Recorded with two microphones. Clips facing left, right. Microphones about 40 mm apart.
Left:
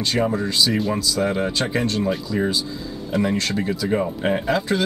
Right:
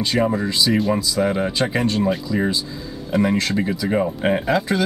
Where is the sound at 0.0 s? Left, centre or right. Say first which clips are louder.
Right 2 dB; centre.